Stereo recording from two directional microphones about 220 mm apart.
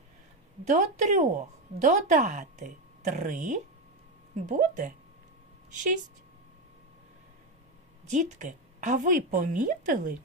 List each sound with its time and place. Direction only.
0.6 s a woman's voice: 35° right (ahead or behind)
8.1 s a woman's voice: 35° right (ahead or behind)